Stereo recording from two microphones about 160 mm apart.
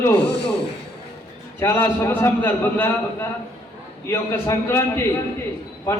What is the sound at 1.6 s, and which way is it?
A man's voice, 15° left (ahead or behind).